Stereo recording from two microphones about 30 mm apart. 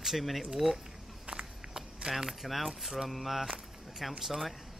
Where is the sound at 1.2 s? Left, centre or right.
Right.